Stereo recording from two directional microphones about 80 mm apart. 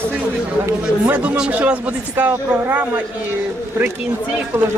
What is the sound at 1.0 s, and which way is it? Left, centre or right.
Speech, right.